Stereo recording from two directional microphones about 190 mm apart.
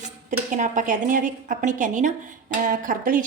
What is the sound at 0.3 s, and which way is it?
A woman's voice, 40° right (ahead or behind).